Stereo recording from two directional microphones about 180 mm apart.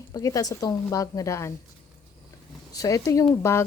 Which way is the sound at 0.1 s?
20° left (ahead or behind).